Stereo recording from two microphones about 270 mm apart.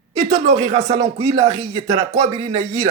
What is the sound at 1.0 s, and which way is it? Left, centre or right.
Speech, centre.